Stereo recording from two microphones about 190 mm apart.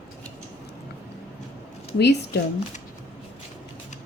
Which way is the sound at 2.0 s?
60° left (ahead or behind).